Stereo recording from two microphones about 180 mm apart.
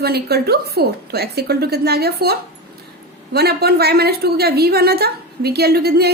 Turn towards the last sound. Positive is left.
turn(degrees=-60)  # may be behind; listen again after turning